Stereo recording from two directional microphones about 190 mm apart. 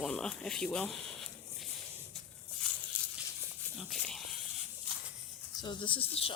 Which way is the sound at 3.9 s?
Centre (ahead or behind).